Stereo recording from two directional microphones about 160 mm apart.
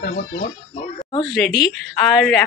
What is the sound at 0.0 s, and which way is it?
Speech, 55° left (ahead or behind).